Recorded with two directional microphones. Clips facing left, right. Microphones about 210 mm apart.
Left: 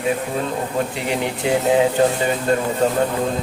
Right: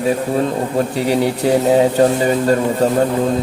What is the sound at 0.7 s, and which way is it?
Speech, 35° right (ahead or behind).